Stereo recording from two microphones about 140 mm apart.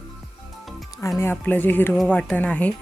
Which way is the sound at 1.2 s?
15° left (ahead or behind).